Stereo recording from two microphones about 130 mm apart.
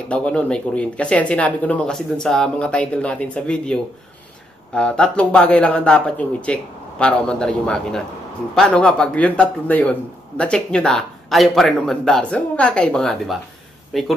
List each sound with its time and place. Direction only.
0.1 s a man's voice: 10° left (ahead or behind)